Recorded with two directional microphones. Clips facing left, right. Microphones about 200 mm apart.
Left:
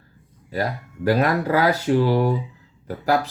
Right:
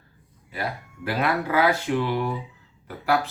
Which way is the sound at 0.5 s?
40° left (ahead or behind).